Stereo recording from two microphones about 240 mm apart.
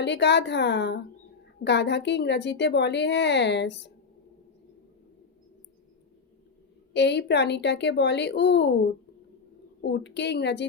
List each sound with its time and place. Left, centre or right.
0.0 s a woman's voice: left
6.9 s a woman's voice: left
9.8 s a woman's voice: left